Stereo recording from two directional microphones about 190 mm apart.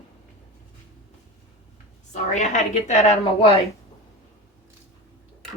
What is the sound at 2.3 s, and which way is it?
Speech, 40° left (ahead or behind).